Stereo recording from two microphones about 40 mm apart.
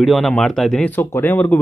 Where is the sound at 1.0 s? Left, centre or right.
Left.